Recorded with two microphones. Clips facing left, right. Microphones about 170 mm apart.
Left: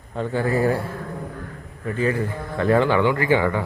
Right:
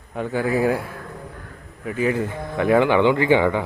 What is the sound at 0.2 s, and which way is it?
Speech, 10° right (ahead or behind).